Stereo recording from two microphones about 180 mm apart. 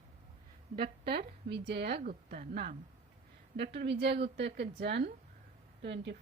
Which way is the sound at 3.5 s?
70° right (ahead or behind).